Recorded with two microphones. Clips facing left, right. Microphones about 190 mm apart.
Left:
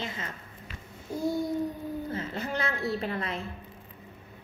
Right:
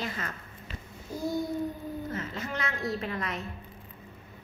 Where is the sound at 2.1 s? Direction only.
35° left (ahead or behind).